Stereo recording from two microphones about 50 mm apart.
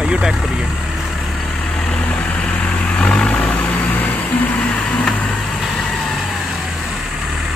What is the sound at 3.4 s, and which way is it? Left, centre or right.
Vehicle, left.